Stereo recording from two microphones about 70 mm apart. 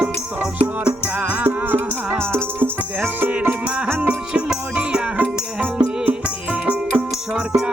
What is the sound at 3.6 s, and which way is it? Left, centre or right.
Music, centre.